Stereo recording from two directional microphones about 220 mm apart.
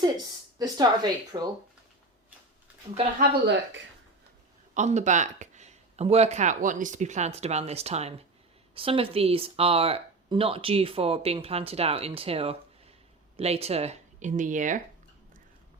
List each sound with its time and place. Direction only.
0.6 s speech: 15° right (ahead or behind)
3.2 s speech: 50° right (ahead or behind)
4.7 s speech: 30° right (ahead or behind)